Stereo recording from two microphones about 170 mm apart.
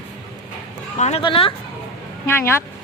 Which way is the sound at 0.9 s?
40° left (ahead or behind).